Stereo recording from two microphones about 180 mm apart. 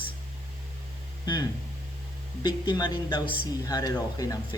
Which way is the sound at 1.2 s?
20° left (ahead or behind).